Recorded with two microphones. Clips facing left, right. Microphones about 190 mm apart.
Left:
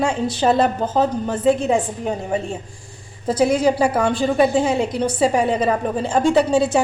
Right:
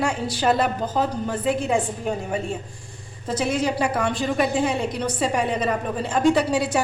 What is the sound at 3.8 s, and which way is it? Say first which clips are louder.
A woman's voice: left 5 dB; 30° left (ahead or behind).